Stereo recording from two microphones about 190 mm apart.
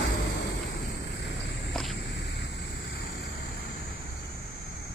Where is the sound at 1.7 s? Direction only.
Centre (ahead or behind).